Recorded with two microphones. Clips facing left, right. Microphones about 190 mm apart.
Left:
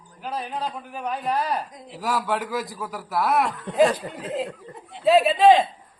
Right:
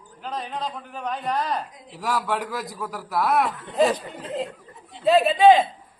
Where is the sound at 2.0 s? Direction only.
Centre (ahead or behind).